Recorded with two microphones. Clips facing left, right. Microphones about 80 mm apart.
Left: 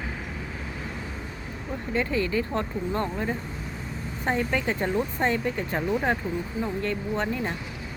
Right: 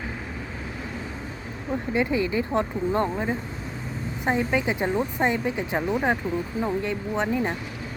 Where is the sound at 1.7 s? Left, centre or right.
Centre.